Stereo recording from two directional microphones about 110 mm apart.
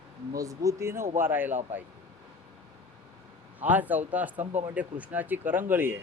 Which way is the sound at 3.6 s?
15° right (ahead or behind).